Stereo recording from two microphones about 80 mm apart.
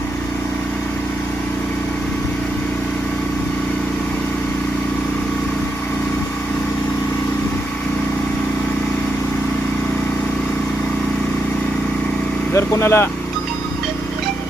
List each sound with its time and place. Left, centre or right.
12.5 s speech: left